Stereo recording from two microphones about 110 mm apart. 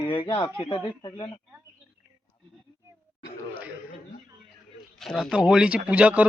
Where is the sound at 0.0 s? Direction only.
50° left (ahead or behind).